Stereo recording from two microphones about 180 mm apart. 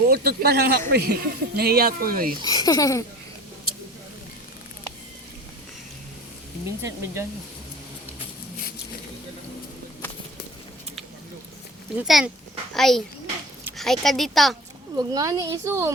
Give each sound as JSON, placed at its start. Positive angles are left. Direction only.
{"t": 0.1, "sound": "speech", "side_deg": -60}
{"t": 2.4, "sound": "speech", "side_deg": 20}
{"t": 6.8, "sound": "speech", "side_deg": -15}
{"t": 11.9, "sound": "speech", "side_deg": -5}
{"t": 14.9, "sound": "a woman's voice", "side_deg": -20}